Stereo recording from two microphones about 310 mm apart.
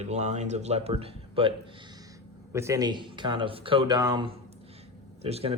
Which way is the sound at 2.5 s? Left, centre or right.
Centre.